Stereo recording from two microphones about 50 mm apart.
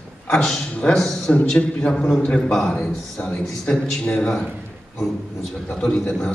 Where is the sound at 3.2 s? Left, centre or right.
Left.